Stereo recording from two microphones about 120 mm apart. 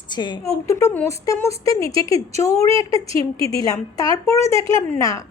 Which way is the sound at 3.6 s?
30° left (ahead or behind).